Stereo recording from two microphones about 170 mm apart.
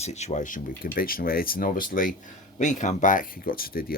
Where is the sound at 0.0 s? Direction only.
40° left (ahead or behind).